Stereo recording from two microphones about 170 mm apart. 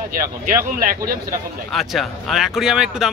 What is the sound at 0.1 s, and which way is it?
Speech, 55° right (ahead or behind).